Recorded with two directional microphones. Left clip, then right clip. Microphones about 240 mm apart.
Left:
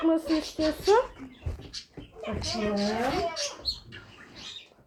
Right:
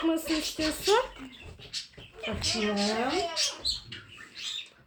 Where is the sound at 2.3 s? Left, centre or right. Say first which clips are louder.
Right 1 dB; right.